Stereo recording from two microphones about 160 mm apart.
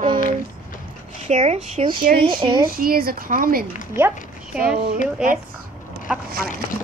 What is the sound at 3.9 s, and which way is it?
Speech, 10° right (ahead or behind).